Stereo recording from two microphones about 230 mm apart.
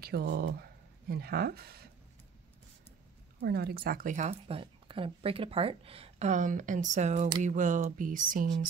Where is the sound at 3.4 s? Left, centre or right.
Right.